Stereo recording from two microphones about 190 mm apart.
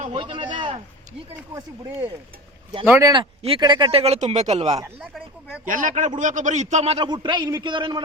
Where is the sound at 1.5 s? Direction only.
15° right (ahead or behind).